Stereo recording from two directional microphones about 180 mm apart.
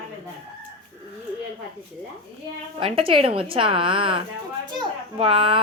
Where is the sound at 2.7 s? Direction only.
30° right (ahead or behind).